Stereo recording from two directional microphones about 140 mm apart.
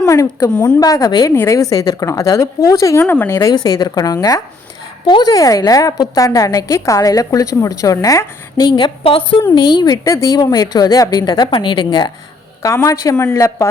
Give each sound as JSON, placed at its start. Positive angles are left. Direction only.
{"t": 0.0, "sound": "a woman's voice", "side_deg": 20}
{"t": 3.5, "sound": "a woman's voice", "side_deg": 30}
{"t": 12.6, "sound": "a woman's voice", "side_deg": 20}